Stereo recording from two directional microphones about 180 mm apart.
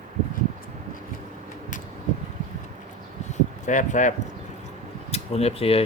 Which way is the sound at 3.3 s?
45° left (ahead or behind).